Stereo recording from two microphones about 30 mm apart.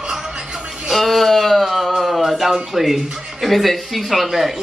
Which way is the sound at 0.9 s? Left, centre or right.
Centre.